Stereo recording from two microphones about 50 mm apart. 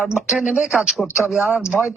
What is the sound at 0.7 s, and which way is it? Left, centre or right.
Speech, centre.